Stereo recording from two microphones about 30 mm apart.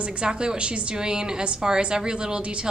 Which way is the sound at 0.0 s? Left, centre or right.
Right.